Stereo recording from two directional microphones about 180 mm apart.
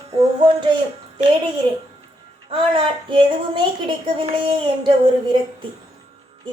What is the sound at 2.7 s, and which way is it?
Speech, 30° right (ahead or behind).